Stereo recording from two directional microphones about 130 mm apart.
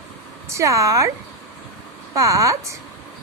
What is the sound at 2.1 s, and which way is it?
Speech, 25° right (ahead or behind).